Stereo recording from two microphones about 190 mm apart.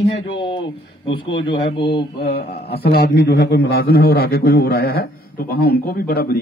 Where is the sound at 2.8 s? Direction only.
60° left (ahead or behind).